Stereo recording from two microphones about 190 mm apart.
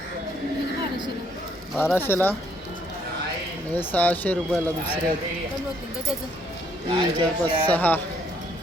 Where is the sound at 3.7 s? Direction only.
10° left (ahead or behind).